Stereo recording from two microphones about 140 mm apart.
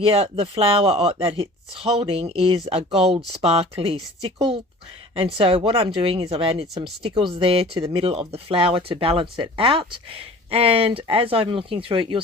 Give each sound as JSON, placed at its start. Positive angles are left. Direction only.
{"t": 0.0, "sound": "speech", "side_deg": -45}